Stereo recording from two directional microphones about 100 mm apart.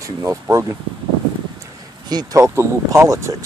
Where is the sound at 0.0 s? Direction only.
30° right (ahead or behind).